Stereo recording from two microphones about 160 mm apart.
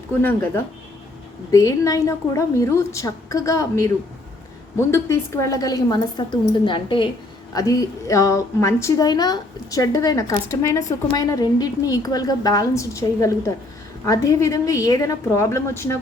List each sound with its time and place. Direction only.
0.2 s a woman's voice: 10° left (ahead or behind)